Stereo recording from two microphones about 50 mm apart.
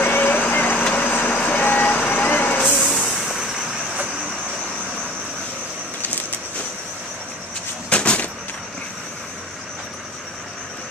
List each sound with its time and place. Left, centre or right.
0.0 s vehicle: left
2.8 s vehicle: centre
7.9 s a sound: left